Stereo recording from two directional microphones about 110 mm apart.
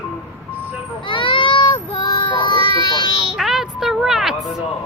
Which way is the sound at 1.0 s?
50° left (ahead or behind).